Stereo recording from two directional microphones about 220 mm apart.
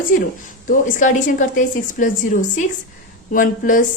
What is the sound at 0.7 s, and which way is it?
A woman's voice, 35° left (ahead or behind).